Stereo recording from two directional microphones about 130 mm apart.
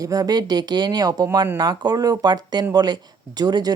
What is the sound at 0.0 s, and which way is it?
Speech, 30° right (ahead or behind).